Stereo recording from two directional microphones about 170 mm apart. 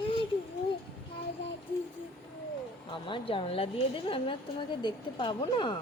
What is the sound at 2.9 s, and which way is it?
A woman's voice, 30° left (ahead or behind).